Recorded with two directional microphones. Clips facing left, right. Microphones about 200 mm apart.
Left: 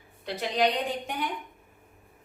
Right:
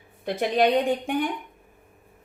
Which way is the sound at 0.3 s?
55° right (ahead or behind).